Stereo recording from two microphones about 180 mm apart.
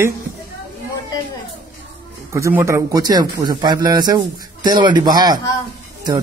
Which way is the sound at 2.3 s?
15° right (ahead or behind).